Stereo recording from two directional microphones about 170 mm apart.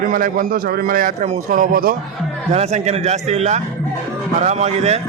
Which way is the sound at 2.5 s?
40° right (ahead or behind).